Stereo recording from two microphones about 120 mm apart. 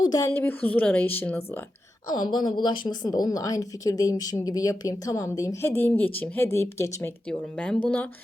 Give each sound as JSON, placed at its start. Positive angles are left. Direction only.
{"t": 0.0, "sound": "speech", "side_deg": 35}
{"t": 0.3, "sound": "speech", "side_deg": 20}
{"t": 2.0, "sound": "speech", "side_deg": 35}
{"t": 7.3, "sound": "speech", "side_deg": 10}